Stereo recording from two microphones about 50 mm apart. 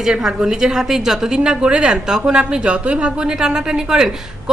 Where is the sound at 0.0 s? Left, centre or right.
Centre.